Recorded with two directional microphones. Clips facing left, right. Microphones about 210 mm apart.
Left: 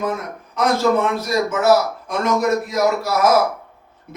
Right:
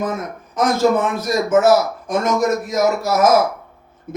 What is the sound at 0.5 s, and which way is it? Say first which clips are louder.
A man's voice: right 1 dB; 50° right (ahead or behind).